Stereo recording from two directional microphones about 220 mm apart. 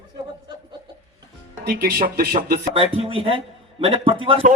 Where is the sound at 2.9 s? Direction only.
25° right (ahead or behind).